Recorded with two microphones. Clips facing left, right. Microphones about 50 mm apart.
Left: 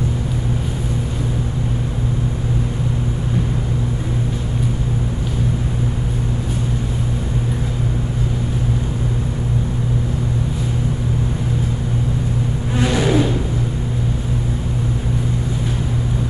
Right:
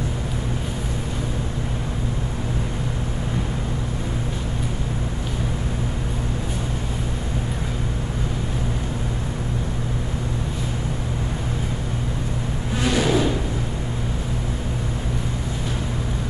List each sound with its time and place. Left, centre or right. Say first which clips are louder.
12.7 s vehicle: left 3 dB; centre